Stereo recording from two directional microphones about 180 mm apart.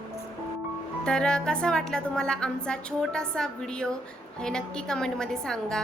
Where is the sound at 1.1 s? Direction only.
5° left (ahead or behind).